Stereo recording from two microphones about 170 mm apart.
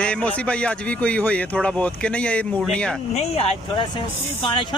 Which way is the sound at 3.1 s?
40° left (ahead or behind).